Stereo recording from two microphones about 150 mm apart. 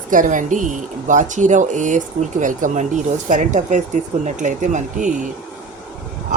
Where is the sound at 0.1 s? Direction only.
60° right (ahead or behind).